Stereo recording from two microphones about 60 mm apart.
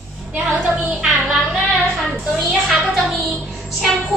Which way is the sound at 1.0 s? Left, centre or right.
Centre.